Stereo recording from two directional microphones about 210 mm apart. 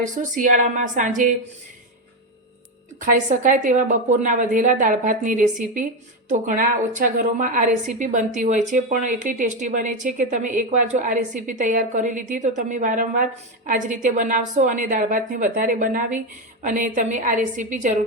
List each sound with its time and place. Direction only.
0.0 s a woman's voice: 40° right (ahead or behind)
3.1 s a woman's voice: 40° right (ahead or behind)